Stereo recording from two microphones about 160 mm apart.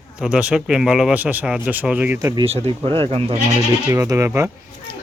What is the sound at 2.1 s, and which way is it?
Speech, 25° right (ahead or behind).